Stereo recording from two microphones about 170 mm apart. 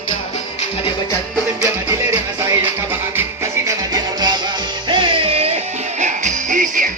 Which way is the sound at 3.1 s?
15° right (ahead or behind).